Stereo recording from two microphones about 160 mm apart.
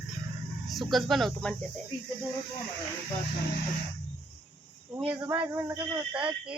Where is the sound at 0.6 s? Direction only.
Centre (ahead or behind).